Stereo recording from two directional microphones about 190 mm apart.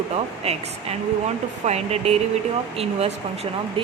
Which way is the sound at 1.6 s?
35° right (ahead or behind).